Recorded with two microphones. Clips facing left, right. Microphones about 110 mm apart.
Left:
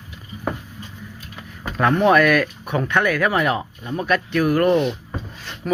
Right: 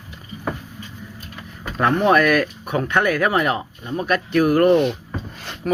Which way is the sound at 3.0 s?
40° right (ahead or behind).